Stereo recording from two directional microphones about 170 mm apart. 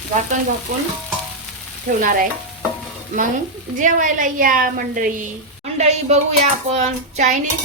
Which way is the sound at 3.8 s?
50° right (ahead or behind).